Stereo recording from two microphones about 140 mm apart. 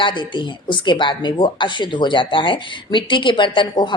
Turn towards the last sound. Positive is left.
turn(degrees=35)  # may be behind; listen again after turning